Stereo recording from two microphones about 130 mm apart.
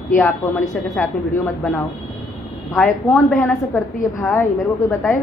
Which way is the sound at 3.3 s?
Centre (ahead or behind).